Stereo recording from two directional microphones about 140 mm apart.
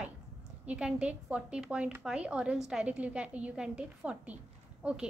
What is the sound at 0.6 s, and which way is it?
A woman's voice, 10° right (ahead or behind).